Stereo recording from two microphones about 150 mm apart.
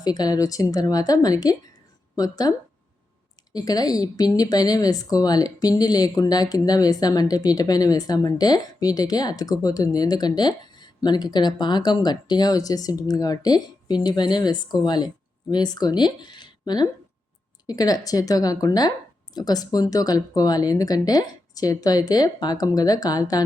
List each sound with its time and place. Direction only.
0.0 s a woman's voice: 25° left (ahead or behind)